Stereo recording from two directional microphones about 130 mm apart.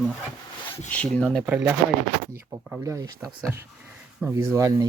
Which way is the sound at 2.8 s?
25° right (ahead or behind).